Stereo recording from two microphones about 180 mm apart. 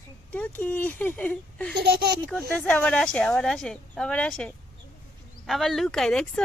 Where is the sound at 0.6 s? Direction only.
10° left (ahead or behind).